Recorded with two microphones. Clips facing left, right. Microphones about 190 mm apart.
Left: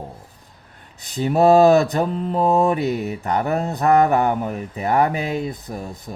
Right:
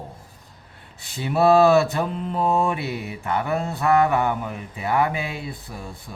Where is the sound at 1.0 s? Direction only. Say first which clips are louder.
Left 3 dB; 40° left (ahead or behind).